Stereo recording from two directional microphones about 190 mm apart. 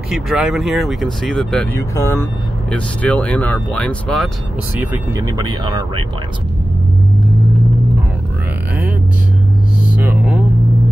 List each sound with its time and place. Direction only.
0.1 s speech: centre (ahead or behind)
4.7 s speech: 10° right (ahead or behind)
9.9 s music: 5° right (ahead or behind)